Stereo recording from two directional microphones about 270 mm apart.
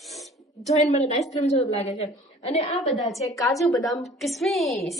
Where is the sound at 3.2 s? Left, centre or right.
Centre.